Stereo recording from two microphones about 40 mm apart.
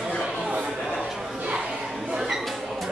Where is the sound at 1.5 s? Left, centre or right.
Right.